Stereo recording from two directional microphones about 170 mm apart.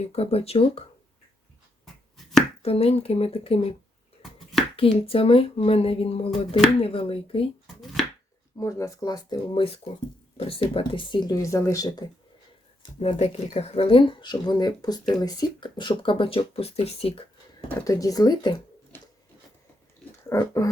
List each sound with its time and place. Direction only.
0.0 s speech: 35° left (ahead or behind)
2.6 s speech: 35° left (ahead or behind)
4.8 s speech: 35° left (ahead or behind)
8.5 s speech: 20° left (ahead or behind)
12.8 s speech: 35° left (ahead or behind)
17.8 s speech: 20° left (ahead or behind)
20.3 s speech: 15° left (ahead or behind)